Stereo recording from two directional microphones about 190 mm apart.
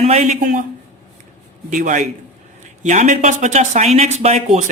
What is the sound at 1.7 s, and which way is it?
Speech, 40° right (ahead or behind).